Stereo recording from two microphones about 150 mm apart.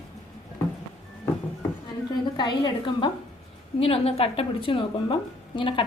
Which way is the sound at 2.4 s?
30° left (ahead or behind).